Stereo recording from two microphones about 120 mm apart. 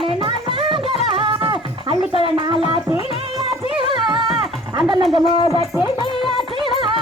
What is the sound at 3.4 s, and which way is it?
Music, 45° right (ahead or behind).